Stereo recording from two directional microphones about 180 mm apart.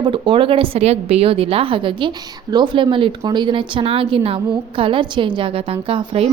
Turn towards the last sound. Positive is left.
turn(degrees=-30)  # may be behind; listen again after turning